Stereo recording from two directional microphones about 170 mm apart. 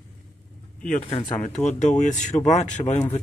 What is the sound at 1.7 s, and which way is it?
A man's voice, 45° left (ahead or behind).